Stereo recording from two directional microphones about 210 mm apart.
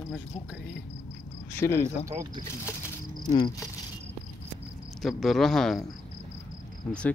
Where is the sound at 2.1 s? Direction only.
15° right (ahead or behind).